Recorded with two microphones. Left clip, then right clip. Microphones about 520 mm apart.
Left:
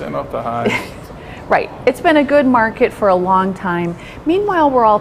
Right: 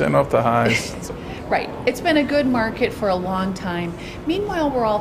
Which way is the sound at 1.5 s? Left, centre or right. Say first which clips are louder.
Left 7 dB; left.